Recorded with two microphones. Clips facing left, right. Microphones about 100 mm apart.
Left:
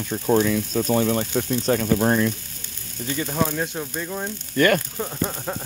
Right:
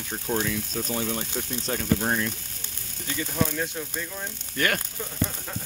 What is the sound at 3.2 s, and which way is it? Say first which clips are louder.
Frying: left 3 dB; 35° left (ahead or behind).